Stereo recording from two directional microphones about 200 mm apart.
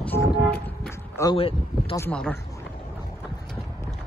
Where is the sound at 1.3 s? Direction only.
30° left (ahead or behind).